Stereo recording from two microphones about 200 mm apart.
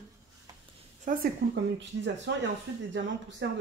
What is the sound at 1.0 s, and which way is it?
Speech, 45° right (ahead or behind).